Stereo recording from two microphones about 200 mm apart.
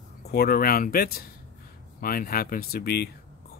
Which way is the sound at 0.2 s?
50° left (ahead or behind).